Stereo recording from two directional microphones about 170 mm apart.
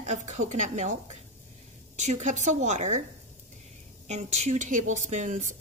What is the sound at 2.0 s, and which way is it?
Speech, 45° right (ahead or behind).